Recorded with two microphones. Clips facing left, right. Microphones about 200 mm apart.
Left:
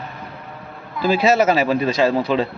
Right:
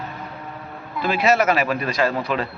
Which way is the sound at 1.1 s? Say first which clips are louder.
Left 3 dB; 30° left (ahead or behind).